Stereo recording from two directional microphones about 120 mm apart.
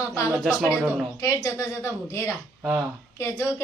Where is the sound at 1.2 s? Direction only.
25° left (ahead or behind).